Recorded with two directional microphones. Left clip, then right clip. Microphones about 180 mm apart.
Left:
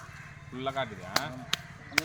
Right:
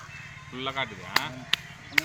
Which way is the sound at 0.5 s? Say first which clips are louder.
Right 2 dB; 80° left.